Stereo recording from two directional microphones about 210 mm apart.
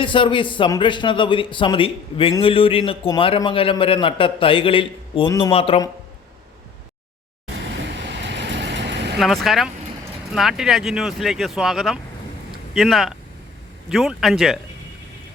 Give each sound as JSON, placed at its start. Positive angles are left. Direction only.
{"t": 0.0, "sound": "a man's voice", "side_deg": 25}
{"t": 7.6, "sound": "vehicle", "side_deg": -55}
{"t": 9.1, "sound": "speech", "side_deg": 0}